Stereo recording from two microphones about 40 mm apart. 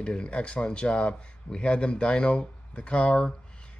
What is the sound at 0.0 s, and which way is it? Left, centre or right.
Speech, left.